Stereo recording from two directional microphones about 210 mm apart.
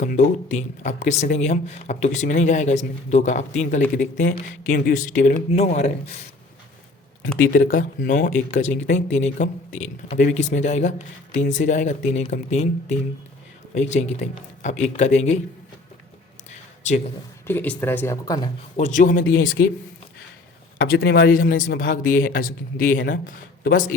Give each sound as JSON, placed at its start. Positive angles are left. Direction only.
{"t": 0.0, "sound": "speech", "side_deg": 35}
{"t": 7.3, "sound": "speech", "side_deg": 40}
{"t": 16.5, "sound": "a sound", "side_deg": 35}
{"t": 17.4, "sound": "speech", "side_deg": 10}
{"t": 18.8, "sound": "speech", "side_deg": 35}
{"t": 19.3, "sound": "speech", "side_deg": 50}
{"t": 20.8, "sound": "speech", "side_deg": 50}